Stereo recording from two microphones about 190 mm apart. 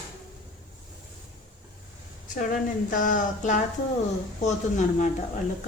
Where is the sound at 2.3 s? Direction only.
45° left (ahead or behind).